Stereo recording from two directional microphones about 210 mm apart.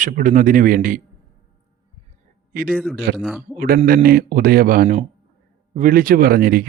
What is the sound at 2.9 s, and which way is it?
Speech, 50° right (ahead or behind).